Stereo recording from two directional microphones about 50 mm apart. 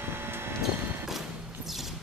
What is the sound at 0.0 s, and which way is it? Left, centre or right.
Vehicle, right.